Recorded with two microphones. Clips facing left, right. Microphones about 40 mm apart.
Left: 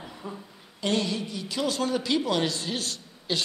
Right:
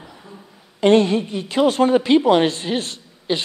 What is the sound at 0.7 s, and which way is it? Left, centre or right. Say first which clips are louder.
A woman's voice: right 13 dB; right.